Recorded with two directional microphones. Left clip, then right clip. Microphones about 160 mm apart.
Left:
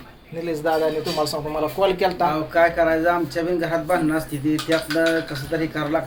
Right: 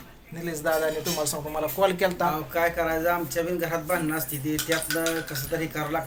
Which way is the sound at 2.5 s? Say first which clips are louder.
Left 11 dB; 20° left (ahead or behind).